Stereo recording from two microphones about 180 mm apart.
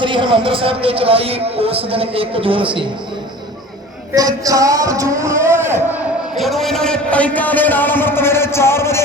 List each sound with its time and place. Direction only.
0.0 s speech: 30° right (ahead or behind)
4.1 s speech: 20° right (ahead or behind)
6.3 s a man's voice: centre (ahead or behind)